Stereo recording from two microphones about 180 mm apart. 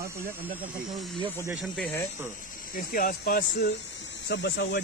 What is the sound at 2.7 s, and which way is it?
Speech, 50° left (ahead or behind).